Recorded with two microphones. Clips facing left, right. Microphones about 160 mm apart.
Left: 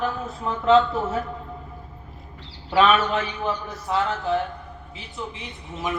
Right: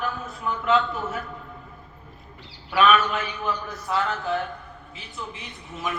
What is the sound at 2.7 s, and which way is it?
A man's voice, 30° left (ahead or behind).